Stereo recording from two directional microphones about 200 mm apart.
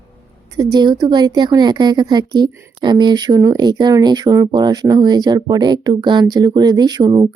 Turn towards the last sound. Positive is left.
turn(degrees=-20)  # may be behind; listen again after turning